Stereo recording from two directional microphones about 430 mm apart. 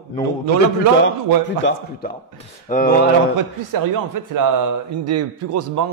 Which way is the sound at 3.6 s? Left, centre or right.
Right.